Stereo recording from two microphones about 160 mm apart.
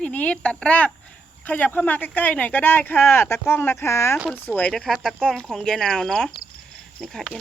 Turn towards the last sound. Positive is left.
turn(degrees=5)  # may be behind; listen again after turning